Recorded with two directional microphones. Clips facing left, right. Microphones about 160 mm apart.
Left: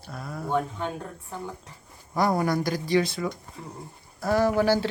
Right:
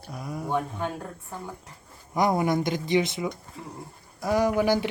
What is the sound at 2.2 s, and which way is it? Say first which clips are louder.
Speech: right 1 dB; 20° right (ahead or behind).